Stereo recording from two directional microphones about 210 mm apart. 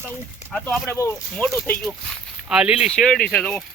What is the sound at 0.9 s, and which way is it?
Speech, 15° left (ahead or behind).